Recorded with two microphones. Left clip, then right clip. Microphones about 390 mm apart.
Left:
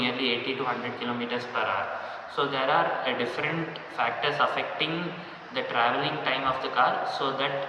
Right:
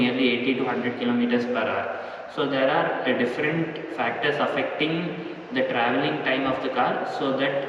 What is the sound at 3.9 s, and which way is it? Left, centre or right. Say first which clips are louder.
A man's voice: right 1 dB; right.